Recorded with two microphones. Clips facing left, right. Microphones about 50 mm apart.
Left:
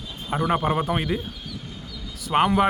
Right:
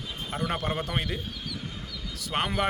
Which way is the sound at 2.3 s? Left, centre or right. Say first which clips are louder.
Left 9 dB; centre.